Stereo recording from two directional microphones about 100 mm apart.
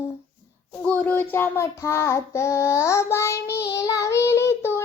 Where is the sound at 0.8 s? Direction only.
15° left (ahead or behind).